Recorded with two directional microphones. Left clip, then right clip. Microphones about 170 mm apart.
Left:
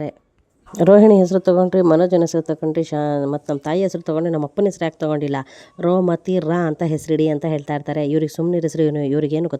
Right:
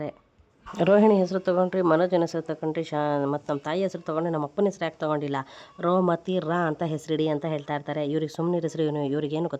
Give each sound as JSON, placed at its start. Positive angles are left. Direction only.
{"t": 0.8, "sound": "speech", "side_deg": 45}